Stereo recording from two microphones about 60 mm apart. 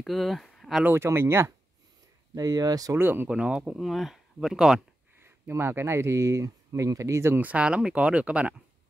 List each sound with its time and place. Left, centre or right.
0.0 s speech: centre
0.9 s speech: right
2.3 s speech: right
3.0 s speech: right
3.3 s speech: centre
5.2 s speech: right
7.3 s speech: right